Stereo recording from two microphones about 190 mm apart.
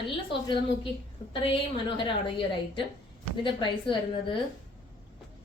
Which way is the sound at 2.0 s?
25° left (ahead or behind).